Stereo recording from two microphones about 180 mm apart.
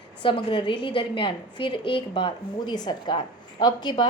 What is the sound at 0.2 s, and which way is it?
A woman's voice, 25° left (ahead or behind).